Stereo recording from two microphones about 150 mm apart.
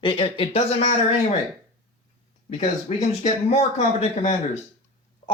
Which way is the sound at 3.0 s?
45° left (ahead or behind).